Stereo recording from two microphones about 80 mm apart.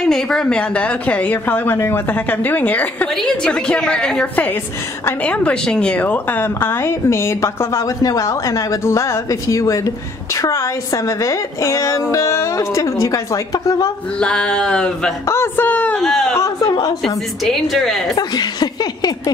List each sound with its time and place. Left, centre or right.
0.0 s speech: centre
3.2 s a woman's voice: centre; by 13.7 s left
14.2 s a woman's voice: centre
15.2 s speech: left
16.0 s a woman's voice: centre
18.1 s speech: left